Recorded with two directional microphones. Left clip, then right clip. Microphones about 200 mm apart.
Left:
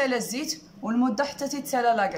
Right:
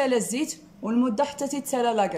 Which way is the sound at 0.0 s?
15° right (ahead or behind).